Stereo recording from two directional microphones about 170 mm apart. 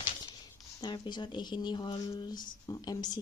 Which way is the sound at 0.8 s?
25° left (ahead or behind).